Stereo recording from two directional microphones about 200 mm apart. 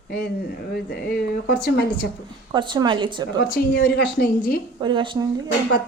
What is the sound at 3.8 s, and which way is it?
Speech, 55° left (ahead or behind).